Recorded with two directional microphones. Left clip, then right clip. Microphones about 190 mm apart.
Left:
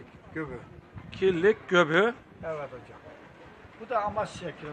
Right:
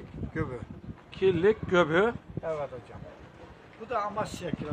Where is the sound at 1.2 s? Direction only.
Centre (ahead or behind).